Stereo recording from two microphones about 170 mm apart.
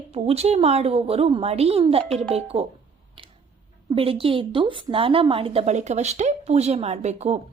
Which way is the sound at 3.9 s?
30° right (ahead or behind).